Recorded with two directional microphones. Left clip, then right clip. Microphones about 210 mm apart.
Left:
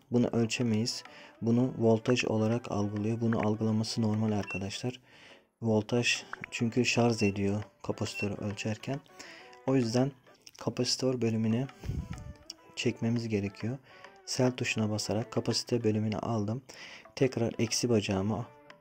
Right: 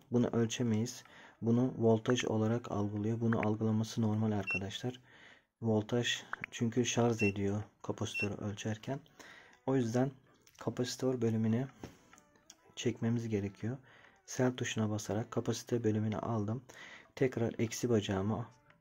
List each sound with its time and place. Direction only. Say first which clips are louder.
0.1 s speech: left 4 dB; 20° left (ahead or behind)